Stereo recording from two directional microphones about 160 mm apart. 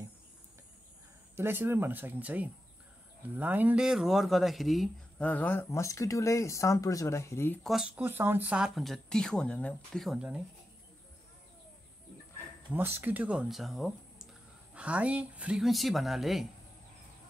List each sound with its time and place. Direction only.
1.3 s speech: 15° right (ahead or behind)
5.3 s speech: 10° left (ahead or behind)
7.6 s speech: centre (ahead or behind)
7.9 s speech: 15° right (ahead or behind); by 9.8 s 5° left (ahead or behind)
9.9 s speech: 5° right (ahead or behind)
12.7 s speech: 10° right (ahead or behind)